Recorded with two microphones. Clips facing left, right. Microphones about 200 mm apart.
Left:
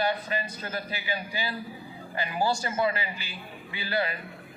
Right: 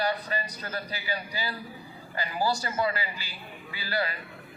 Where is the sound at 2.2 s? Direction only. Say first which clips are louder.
Left 1 dB; 20° left (ahead or behind).